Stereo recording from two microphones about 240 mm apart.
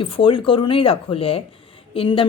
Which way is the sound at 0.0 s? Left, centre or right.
Left.